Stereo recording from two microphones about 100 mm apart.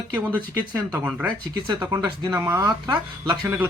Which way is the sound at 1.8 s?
30° right (ahead or behind).